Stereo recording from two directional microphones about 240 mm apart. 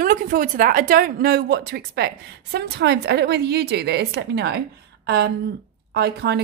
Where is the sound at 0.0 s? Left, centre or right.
Right.